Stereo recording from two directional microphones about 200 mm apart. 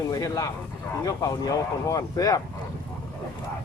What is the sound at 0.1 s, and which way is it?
Speech, 15° left (ahead or behind).